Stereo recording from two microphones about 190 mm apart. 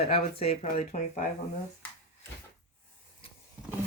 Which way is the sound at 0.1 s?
30° left (ahead or behind).